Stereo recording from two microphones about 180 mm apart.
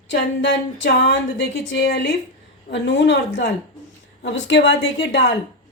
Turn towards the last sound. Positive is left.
turn(degrees=75)  # may be behind; listen again after turning